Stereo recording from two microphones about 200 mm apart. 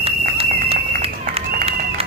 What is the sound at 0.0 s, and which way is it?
Run, 30° right (ahead or behind).